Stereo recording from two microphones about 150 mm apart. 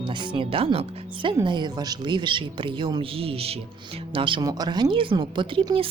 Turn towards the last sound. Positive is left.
turn(degrees=-35)  # may be behind; listen again after turning